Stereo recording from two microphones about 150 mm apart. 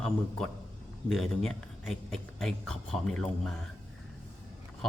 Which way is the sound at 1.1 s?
Centre (ahead or behind).